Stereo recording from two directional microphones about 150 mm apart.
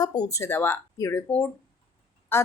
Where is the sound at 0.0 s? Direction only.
25° left (ahead or behind).